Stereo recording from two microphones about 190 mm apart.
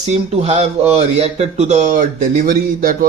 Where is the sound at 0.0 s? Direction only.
35° right (ahead or behind).